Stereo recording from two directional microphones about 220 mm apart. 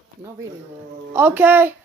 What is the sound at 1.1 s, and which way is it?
Speech, 10° right (ahead or behind).